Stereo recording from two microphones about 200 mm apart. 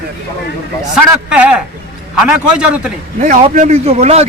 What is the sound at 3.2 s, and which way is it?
A man's voice, 35° right (ahead or behind).